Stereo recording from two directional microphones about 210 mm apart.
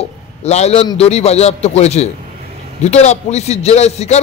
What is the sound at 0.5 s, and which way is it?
A man's voice, 30° left (ahead or behind).